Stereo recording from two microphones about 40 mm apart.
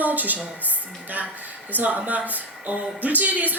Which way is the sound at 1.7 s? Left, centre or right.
Right.